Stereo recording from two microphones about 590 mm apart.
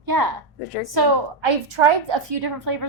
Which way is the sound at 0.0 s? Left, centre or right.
Right.